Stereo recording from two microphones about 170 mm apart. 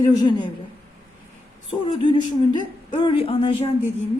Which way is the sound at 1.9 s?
25° left (ahead or behind).